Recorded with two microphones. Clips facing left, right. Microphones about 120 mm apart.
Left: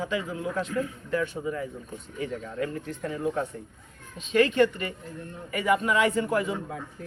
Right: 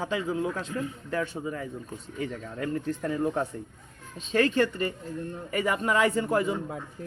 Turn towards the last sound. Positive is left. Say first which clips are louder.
# even
turn(degrees=-30)  # may be behind; listen again after turning